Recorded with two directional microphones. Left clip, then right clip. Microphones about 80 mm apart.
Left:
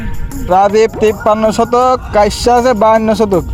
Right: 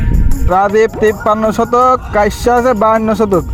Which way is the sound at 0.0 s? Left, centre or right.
Centre.